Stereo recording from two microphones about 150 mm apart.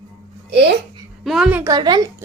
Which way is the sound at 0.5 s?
90° right.